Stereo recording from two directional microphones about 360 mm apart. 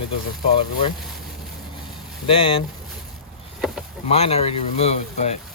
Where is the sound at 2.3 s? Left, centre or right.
Centre.